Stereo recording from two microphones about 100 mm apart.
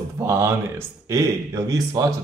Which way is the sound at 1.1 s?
35° right (ahead or behind).